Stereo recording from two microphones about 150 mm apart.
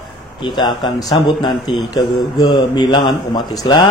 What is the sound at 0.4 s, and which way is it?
A man's voice, 30° left (ahead or behind).